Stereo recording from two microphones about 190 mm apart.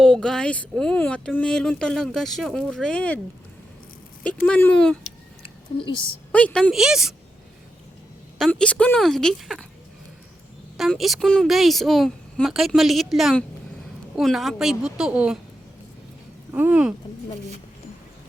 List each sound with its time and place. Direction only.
0.0 s speech: 5° left (ahead or behind)
4.4 s speech: 5° left (ahead or behind)
5.0 s a sound: 30° left (ahead or behind)
6.3 s speech: 5° left (ahead or behind)
8.4 s speech: 5° left (ahead or behind)
10.8 s speech: centre (ahead or behind)
16.5 s speech: 10° right (ahead or behind)